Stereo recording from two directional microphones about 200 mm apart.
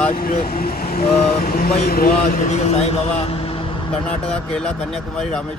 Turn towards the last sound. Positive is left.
turn(degrees=5)  # may be behind; listen again after turning